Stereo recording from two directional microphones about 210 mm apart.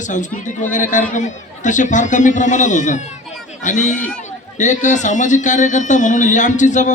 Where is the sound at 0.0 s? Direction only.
35° left (ahead or behind).